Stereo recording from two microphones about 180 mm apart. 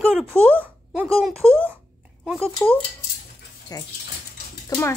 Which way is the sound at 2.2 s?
5° right (ahead or behind).